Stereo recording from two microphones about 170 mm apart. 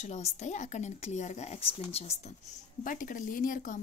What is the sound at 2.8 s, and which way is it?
Speech, 55° left (ahead or behind).